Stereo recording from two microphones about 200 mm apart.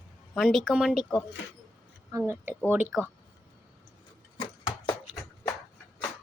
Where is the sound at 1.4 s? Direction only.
65° left (ahead or behind).